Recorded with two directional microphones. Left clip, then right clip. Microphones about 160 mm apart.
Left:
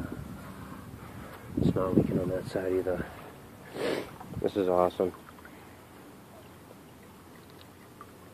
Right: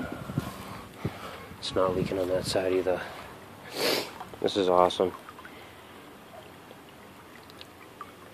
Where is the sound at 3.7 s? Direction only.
5° right (ahead or behind).